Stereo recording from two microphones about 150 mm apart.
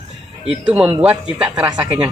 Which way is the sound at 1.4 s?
25° right (ahead or behind).